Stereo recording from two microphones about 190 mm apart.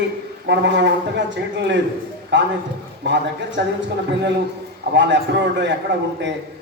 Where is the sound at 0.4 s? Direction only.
65° right (ahead or behind).